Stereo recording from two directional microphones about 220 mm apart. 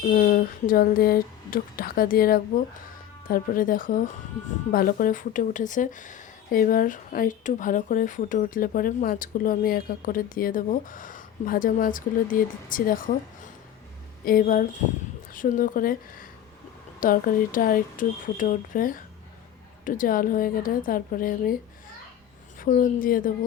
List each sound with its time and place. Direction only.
0.0 s speech: 40° left (ahead or behind)
14.3 s speech: 40° left (ahead or behind)
22.6 s speech: 40° left (ahead or behind)